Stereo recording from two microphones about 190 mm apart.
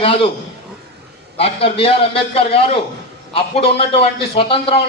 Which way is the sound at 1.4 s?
30° left (ahead or behind).